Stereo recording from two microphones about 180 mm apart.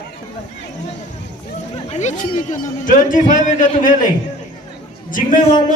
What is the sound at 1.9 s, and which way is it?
A man's voice, 40° left (ahead or behind).